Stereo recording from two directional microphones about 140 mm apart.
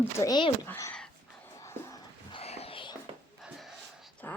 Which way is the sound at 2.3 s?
45° left (ahead or behind).